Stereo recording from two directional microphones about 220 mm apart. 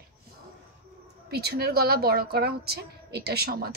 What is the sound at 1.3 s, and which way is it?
A woman's voice, 45° right (ahead or behind).